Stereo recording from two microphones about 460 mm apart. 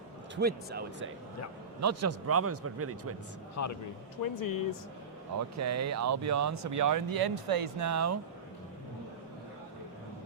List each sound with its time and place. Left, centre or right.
0.3 s speech: right
1.8 s speech: right
3.6 s speech: left
5.5 s speech: right
7.8 s speech: right